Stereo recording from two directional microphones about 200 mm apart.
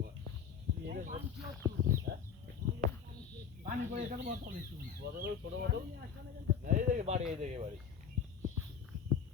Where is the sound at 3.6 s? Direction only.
40° right (ahead or behind).